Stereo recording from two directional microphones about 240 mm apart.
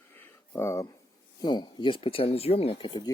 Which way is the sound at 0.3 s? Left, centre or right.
Centre.